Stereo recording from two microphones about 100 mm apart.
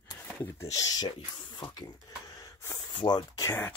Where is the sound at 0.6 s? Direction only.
35° left (ahead or behind).